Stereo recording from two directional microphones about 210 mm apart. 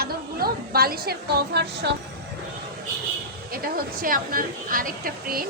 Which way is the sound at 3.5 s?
45° right (ahead or behind).